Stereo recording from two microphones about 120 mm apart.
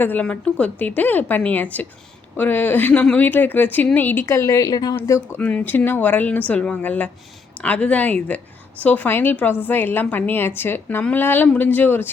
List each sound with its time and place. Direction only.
0.0 s a woman's voice: 15° left (ahead or behind)